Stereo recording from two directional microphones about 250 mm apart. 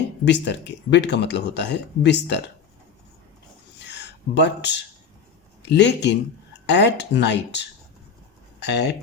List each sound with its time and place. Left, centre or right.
0.3 s speech: left
3.8 s a sound: left
5.6 s speech: left